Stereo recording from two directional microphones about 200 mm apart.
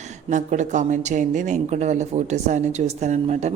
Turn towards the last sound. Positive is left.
turn(degrees=-35)  # may be behind; listen again after turning